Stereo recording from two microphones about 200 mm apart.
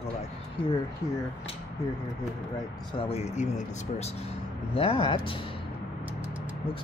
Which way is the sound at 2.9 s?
30° left (ahead or behind).